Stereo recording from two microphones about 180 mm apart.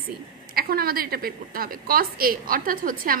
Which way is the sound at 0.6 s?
55° right (ahead or behind).